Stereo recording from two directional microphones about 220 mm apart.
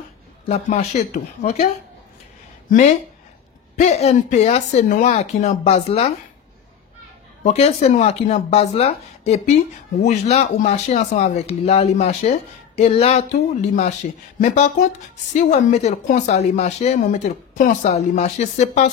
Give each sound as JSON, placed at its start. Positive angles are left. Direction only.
{"t": 0.5, "sound": "speech", "side_deg": 30}
{"t": 3.7, "sound": "speech", "side_deg": 30}
{"t": 7.4, "sound": "speech", "side_deg": 30}